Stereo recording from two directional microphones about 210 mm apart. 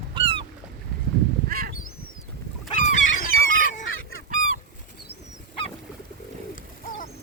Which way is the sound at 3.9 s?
75° left (ahead or behind).